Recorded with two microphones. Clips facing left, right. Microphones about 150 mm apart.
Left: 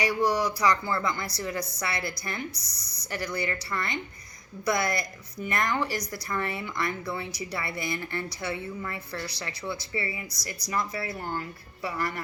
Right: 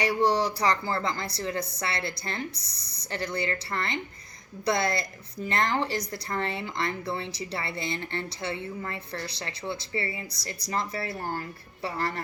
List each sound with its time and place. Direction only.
0.1 s speech: 30° right (ahead or behind)
2.8 s speech: 60° right (ahead or behind)
3.3 s speech: 25° right (ahead or behind)
9.6 s speech: 25° right (ahead or behind)